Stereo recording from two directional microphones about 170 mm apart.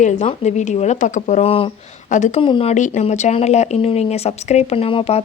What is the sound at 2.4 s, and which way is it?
Speech, 30° left (ahead or behind).